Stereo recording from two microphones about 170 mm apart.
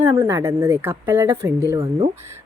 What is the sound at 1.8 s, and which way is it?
Speech, 30° right (ahead or behind).